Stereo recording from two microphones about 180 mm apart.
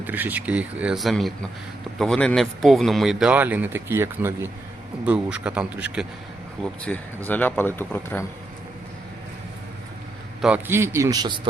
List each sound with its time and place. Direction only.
0.0 s speech: 10° right (ahead or behind)
6.6 s speech: 5° left (ahead or behind)
10.4 s speech: 10° right (ahead or behind)